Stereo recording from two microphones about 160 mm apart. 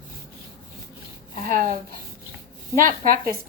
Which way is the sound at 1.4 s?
60° right (ahead or behind).